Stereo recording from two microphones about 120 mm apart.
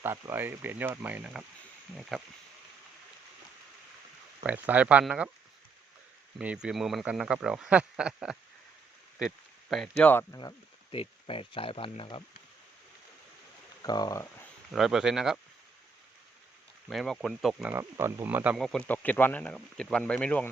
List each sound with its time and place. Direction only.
0.0 s speech: 20° right (ahead or behind); by 2.2 s centre (ahead or behind)
4.4 s speech: 15° right (ahead or behind)
6.4 s speech: 10° right (ahead or behind)
10.3 s speech: 30° left (ahead or behind)
10.9 s speech: 50° left (ahead or behind)
13.8 s speech: 35° left (ahead or behind)
14.7 s speech: centre (ahead or behind)
16.9 s speech: centre (ahead or behind)
17.7 s speech: 20° right (ahead or behind)
18.5 s speech: 5° left (ahead or behind)
18.9 s speech: 15° left (ahead or behind)